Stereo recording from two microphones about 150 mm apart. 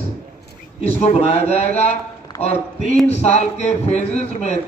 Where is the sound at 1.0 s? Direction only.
45° left (ahead or behind).